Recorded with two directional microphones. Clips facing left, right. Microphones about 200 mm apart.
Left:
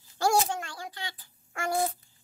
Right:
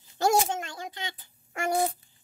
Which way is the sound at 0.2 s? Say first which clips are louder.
Right 2 dB; 20° right (ahead or behind).